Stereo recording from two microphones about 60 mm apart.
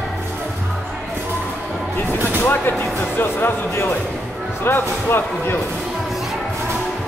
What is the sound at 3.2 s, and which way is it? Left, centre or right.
Speech, left.